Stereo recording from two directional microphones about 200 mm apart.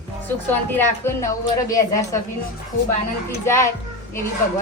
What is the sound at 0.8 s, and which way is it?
Speech, 15° left (ahead or behind).